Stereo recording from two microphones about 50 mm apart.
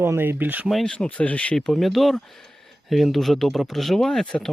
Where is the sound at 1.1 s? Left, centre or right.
Left.